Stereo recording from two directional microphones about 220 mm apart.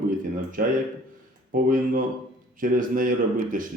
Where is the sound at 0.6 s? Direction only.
40° right (ahead or behind).